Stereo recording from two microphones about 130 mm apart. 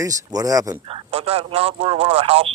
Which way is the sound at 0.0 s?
25° right (ahead or behind).